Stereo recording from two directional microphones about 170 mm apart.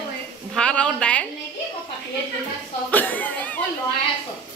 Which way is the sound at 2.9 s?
10° left (ahead or behind).